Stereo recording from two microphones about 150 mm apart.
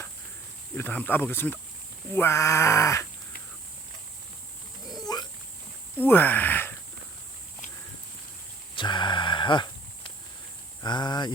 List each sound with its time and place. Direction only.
0.8 s speech: 10° left (ahead or behind)
5.1 s dog: 25° left (ahead or behind)
6.1 s speech: 10° left (ahead or behind)
8.7 s a sound: 30° left (ahead or behind)
10.8 s speech: 30° left (ahead or behind)